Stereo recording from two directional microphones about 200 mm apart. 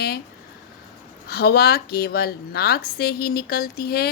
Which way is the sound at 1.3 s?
50° left (ahead or behind).